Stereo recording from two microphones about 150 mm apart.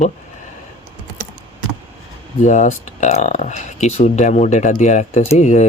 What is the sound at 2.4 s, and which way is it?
Speech, 55° left (ahead or behind).